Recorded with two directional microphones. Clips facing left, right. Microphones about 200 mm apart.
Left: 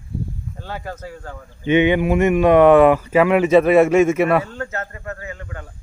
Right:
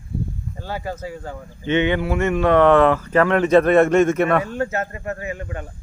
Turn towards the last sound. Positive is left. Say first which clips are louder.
# right 4 dB
turn(degrees=-20)  # may be behind; listen again after turning